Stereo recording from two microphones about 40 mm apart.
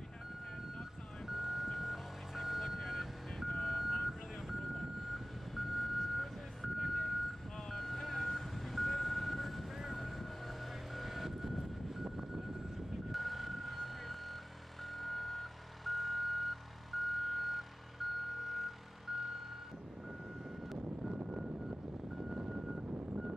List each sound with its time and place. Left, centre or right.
1.2 s vehicle: centre
22.3 s vehicle: right